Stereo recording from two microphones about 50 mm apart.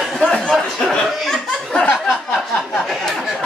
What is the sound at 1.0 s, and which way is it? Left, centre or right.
Laughter, centre.